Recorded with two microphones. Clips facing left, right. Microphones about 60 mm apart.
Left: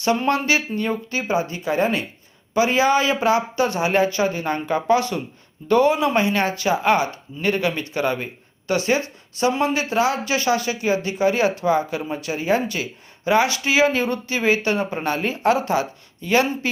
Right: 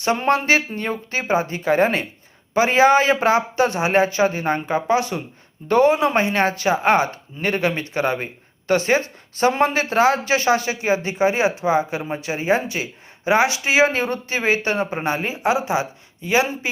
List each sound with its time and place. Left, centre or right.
0.0 s speech: right; by 16.5 s centre